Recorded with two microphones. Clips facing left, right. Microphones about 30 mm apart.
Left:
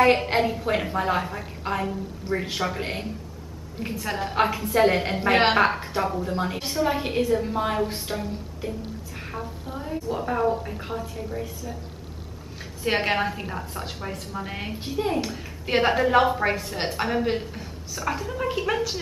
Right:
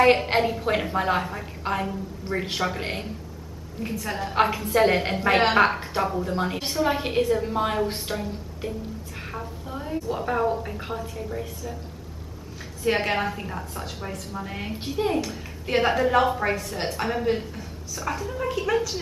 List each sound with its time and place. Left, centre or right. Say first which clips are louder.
0.0 s a woman's voice: right 1 dB; centre
3.8 s a woman's voice: left 1 dB; centre
4.3 s a woman's voice: right 2 dB; centre
12.8 s a woman's voice: even; centre
14.9 s a woman's voice: right 1 dB; centre
15.2 s a woman's voice: left 1 dB; centre